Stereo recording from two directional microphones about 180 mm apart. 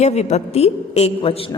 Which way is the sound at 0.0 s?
40° left (ahead or behind).